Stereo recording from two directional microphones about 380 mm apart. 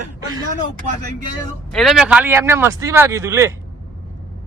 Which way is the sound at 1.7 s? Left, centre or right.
Centre.